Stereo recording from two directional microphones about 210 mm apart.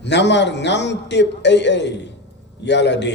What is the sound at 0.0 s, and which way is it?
A man's voice, 55° left (ahead or behind).